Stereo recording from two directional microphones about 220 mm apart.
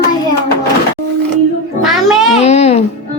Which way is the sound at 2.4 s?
30° left (ahead or behind).